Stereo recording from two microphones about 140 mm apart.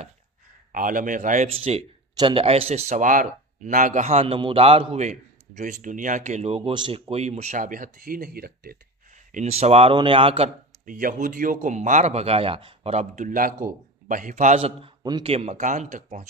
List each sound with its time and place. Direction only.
0.7 s a man's voice: 75° right (ahead or behind)
9.3 s a man's voice: 50° right (ahead or behind)
10.9 s speech: 75° right (ahead or behind); by 14.7 s 55° right (ahead or behind)
14.8 s a man's voice: 30° right (ahead or behind)
15.2 s speech: 45° right (ahead or behind)